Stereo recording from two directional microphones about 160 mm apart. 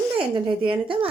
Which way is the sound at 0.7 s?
30° right (ahead or behind).